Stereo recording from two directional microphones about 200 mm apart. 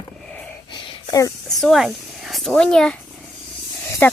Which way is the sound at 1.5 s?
Centre (ahead or behind).